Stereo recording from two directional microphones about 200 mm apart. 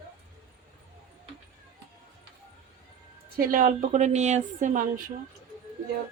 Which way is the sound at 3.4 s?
45° right (ahead or behind).